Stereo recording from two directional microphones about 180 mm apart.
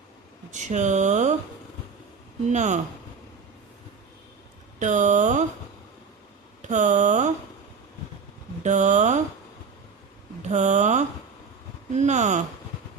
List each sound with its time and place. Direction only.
0.5 s speech: 40° right (ahead or behind)
2.5 s speech: 40° right (ahead or behind)
4.8 s speech: 45° right (ahead or behind)
6.6 s a sound: 45° right (ahead or behind)
8.6 s speech: 40° right (ahead or behind)
10.5 s speech: 40° right (ahead or behind)